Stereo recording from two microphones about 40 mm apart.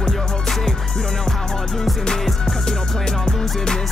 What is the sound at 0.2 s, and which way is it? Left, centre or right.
Music, centre.